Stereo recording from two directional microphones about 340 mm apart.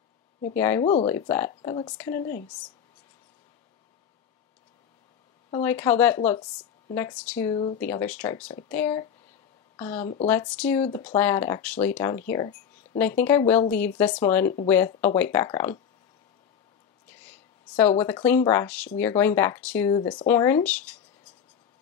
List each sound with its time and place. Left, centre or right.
0.6 s speech: centre
5.5 s speech: centre
10.8 s speech: centre
17.7 s speech: centre